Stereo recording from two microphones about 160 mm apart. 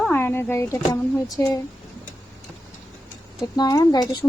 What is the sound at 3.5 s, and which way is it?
Speech, 25° left (ahead or behind).